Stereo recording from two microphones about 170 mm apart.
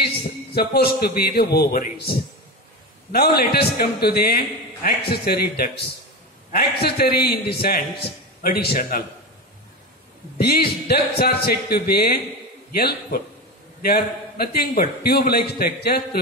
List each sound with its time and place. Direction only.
0.6 s a man's voice: 65° left (ahead or behind)
10.4 s a man's voice: 65° left (ahead or behind)